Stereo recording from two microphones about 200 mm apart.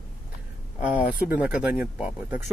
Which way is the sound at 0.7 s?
5° right (ahead or behind).